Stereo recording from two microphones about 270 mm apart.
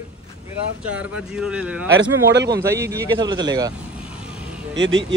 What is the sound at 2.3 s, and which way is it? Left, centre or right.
Speech, right.